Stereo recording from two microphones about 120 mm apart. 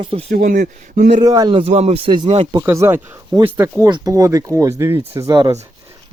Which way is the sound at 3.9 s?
30° right (ahead or behind).